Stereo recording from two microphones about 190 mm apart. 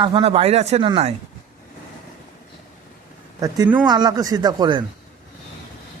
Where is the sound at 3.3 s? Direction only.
20° right (ahead or behind).